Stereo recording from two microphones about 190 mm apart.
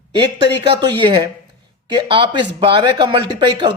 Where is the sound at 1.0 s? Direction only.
25° right (ahead or behind).